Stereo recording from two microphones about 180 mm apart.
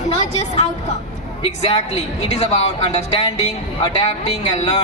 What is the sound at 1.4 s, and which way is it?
Speech, 35° left (ahead or behind).